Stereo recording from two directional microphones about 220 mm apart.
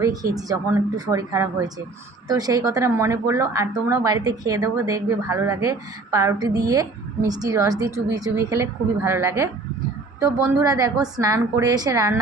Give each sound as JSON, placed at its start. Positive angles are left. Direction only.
{"t": 0.0, "sound": "speech", "side_deg": -15}